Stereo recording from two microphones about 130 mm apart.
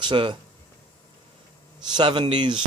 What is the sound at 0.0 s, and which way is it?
Speech, 35° right (ahead or behind).